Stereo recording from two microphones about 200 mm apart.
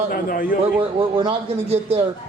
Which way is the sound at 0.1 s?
45° left (ahead or behind).